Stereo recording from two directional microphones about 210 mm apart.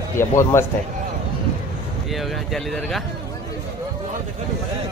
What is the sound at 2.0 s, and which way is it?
Speech, centre (ahead or behind).